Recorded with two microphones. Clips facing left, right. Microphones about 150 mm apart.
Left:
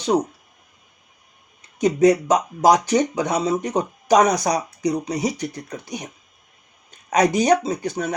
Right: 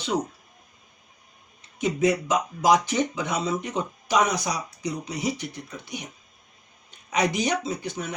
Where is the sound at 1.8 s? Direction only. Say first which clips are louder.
Left 7 dB; 40° left (ahead or behind).